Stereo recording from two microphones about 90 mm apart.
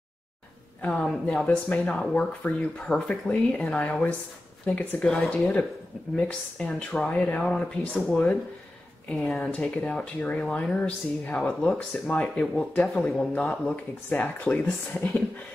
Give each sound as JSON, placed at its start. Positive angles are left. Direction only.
{"t": 0.8, "sound": "speech", "side_deg": 10}